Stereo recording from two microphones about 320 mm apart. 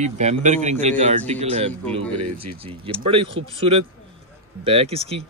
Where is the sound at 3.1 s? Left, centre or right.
Centre.